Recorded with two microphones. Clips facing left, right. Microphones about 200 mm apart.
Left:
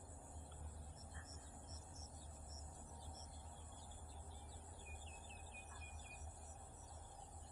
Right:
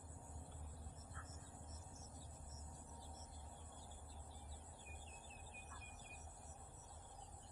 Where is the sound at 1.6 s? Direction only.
25° left (ahead or behind).